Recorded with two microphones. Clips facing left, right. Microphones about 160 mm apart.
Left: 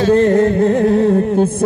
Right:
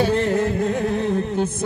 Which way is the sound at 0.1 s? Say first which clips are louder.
Left 9 dB; 50° left (ahead or behind).